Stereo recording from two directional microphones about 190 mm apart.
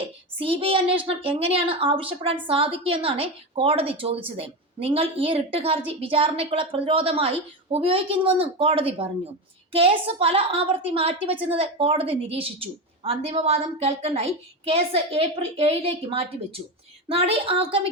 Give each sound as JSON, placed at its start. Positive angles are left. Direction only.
{"t": 0.0, "sound": "child singing", "side_deg": -30}
{"t": 1.0, "sound": "a woman's voice", "side_deg": -30}